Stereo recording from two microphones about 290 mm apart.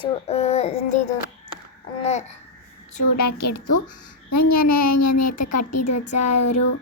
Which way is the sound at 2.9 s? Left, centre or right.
Left.